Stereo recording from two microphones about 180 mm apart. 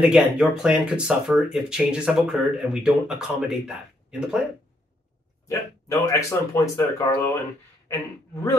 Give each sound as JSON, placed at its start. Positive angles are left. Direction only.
{"t": 0.0, "sound": "speech", "side_deg": -5}
{"t": 5.5, "sound": "speech", "side_deg": 15}